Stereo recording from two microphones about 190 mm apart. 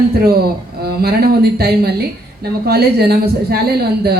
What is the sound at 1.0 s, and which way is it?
Speech, 55° right (ahead or behind).